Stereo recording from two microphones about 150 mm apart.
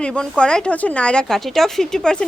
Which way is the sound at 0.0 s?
5° left (ahead or behind).